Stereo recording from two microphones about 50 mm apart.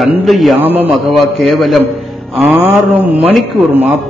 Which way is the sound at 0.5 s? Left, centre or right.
Right.